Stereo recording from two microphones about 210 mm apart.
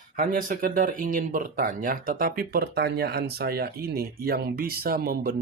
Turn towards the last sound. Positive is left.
turn(degrees=-45)  # may be behind; listen again after turning